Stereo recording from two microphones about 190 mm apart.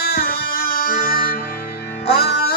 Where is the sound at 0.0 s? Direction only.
55° left (ahead or behind).